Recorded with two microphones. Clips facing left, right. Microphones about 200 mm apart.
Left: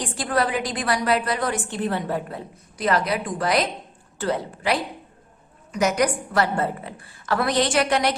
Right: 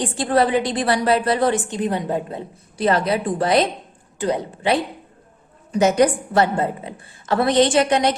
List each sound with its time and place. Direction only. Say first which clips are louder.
0.0 s a woman's voice: right 5 dB; 25° right (ahead or behind)